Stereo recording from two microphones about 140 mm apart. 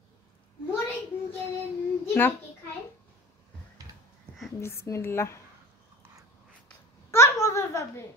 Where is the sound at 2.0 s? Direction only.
15° left (ahead or behind).